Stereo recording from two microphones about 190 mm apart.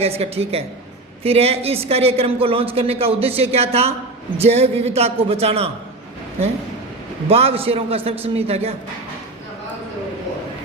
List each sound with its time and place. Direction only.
0.0 s a woman's voice: 30° right (ahead or behind)
7.3 s a woman's voice: 30° right (ahead or behind)